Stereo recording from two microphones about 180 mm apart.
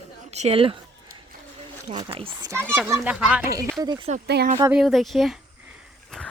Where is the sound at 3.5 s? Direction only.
20° right (ahead or behind).